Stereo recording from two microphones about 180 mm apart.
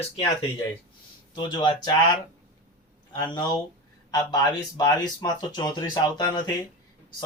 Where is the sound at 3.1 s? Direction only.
25° left (ahead or behind).